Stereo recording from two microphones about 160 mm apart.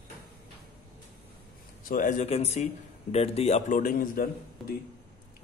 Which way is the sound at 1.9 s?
50° left (ahead or behind).